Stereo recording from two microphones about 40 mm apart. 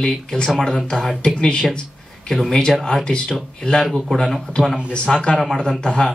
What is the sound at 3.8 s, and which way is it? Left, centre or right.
Speech, centre.